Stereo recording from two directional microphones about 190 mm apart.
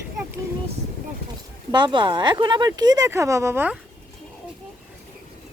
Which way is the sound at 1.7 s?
25° right (ahead or behind).